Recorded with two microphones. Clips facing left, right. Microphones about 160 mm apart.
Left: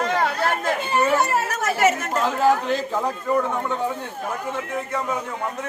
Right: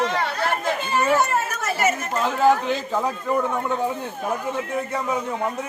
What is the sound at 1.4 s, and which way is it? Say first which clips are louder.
Chatter: left 3 dB; 75° left (ahead or behind).